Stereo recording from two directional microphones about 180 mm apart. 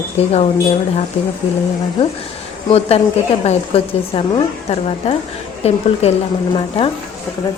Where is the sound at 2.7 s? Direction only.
35° left (ahead or behind).